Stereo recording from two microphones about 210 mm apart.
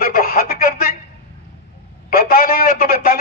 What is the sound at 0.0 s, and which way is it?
Telephone, 45° left (ahead or behind).